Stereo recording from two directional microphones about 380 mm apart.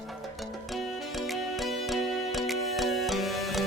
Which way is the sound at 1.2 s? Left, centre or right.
Centre.